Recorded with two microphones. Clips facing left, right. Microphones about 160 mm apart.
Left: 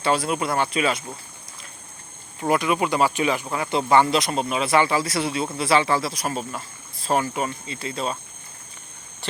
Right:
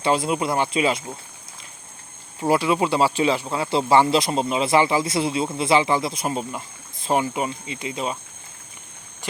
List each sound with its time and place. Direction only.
0.0 s speech: 25° right (ahead or behind)
2.4 s speech: 25° right (ahead or behind)